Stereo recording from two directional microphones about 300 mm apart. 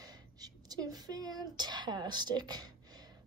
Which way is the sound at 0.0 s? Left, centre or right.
Centre.